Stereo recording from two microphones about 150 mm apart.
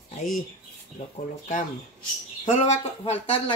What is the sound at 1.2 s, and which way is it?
Speech, 65° left (ahead or behind).